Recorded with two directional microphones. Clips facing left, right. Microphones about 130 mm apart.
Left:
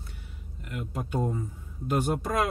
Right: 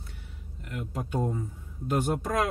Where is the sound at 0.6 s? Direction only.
10° left (ahead or behind).